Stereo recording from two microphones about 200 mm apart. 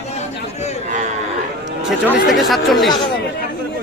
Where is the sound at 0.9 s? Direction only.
35° right (ahead or behind).